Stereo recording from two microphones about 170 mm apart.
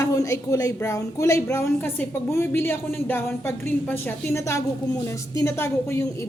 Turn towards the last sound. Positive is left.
turn(degrees=15)  # may be behind; listen again after turning